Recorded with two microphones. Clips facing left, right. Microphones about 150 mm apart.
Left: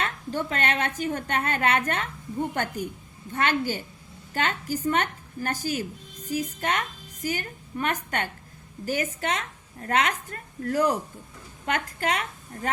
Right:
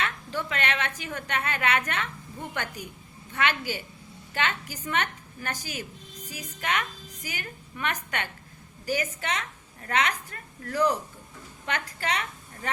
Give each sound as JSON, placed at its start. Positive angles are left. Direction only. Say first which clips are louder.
{"t": 0.0, "sound": "a woman's voice", "louder": "left 2 dB", "side_deg": 45}